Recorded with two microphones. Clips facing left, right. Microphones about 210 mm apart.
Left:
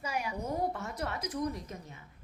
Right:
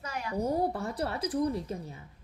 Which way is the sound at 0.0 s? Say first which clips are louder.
Left 1 dB; 15° left (ahead or behind).